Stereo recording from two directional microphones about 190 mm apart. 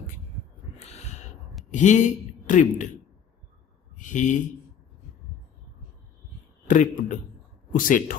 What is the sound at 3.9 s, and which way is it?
Speech, 40° left (ahead or behind).